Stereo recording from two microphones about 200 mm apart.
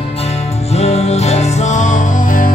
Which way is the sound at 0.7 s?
30° left (ahead or behind).